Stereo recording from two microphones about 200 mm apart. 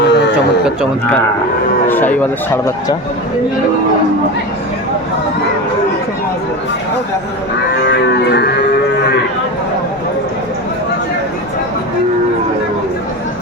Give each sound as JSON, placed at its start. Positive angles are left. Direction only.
{"t": 0.0, "sound": "a sound", "side_deg": 60}
{"t": 1.9, "sound": "speech", "side_deg": 10}
{"t": 7.9, "sound": "music", "side_deg": 60}